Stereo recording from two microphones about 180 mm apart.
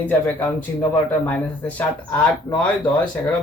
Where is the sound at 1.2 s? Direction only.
10° left (ahead or behind).